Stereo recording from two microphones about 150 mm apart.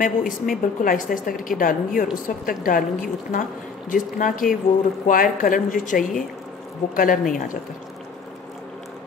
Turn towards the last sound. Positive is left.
turn(degrees=65)  # may be behind; listen again after turning